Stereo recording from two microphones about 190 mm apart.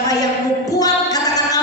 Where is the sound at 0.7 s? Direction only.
20° left (ahead or behind).